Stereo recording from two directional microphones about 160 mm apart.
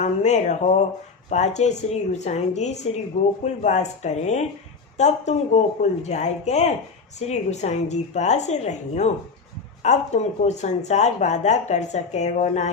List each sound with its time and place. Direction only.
0.0 s speech: 45° left (ahead or behind)